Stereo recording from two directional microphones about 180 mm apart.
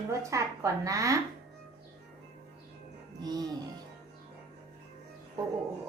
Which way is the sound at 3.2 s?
20° right (ahead or behind).